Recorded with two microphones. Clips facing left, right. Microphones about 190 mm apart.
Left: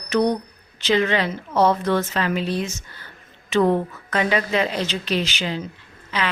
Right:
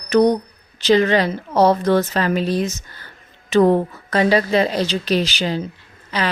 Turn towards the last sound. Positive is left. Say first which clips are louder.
# right 3 dB
turn(degrees=-40)  # may be behind; listen again after turning